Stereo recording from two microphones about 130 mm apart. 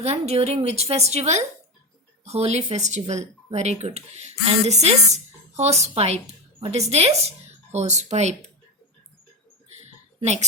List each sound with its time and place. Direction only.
0.0 s a woman's voice: 55° right (ahead or behind)
10.2 s speech: 60° right (ahead or behind)